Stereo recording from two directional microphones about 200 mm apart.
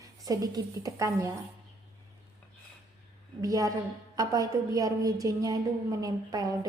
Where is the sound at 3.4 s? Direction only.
15° right (ahead or behind).